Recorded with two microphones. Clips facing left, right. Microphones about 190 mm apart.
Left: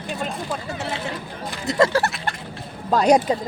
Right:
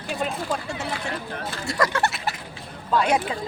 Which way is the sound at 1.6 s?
25° left (ahead or behind).